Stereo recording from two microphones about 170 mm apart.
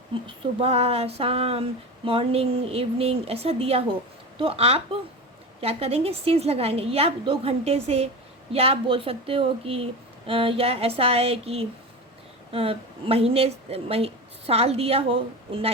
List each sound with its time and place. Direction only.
0.1 s a woman's voice: 35° right (ahead or behind)